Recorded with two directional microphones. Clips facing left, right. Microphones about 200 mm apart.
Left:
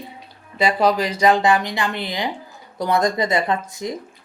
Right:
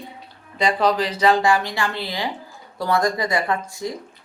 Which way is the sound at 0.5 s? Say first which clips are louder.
Left 1 dB; 10° left (ahead or behind).